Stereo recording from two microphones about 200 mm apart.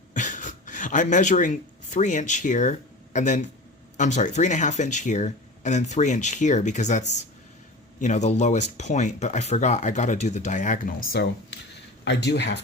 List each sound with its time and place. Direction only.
0.1 s a sound: 40° left (ahead or behind)
3.9 s speech: 35° left (ahead or behind)
12.0 s speech: 60° left (ahead or behind)